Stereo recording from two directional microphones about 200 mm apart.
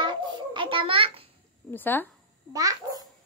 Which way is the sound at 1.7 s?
10° left (ahead or behind).